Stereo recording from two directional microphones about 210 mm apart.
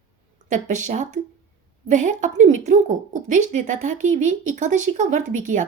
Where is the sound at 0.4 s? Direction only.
35° right (ahead or behind).